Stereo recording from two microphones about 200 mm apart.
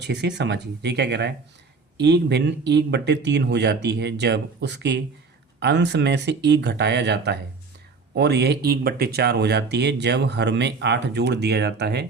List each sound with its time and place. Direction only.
0.0 s speech: 55° right (ahead or behind)